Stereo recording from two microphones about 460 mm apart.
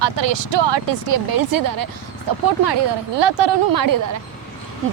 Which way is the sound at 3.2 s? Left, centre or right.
Right.